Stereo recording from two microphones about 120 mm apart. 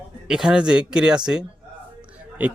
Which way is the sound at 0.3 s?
5° right (ahead or behind).